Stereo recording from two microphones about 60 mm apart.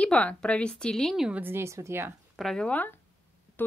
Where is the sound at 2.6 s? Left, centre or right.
Left.